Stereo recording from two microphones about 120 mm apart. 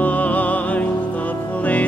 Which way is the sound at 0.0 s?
10° left (ahead or behind).